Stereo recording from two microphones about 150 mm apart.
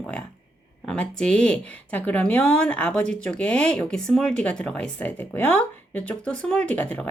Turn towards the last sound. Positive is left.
turn(degrees=10)  # may be behind; listen again after turning